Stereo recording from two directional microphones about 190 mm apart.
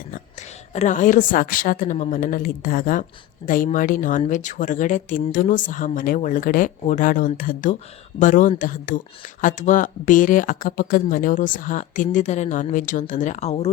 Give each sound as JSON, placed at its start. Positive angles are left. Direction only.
{"t": 0.7, "sound": "speech", "side_deg": 40}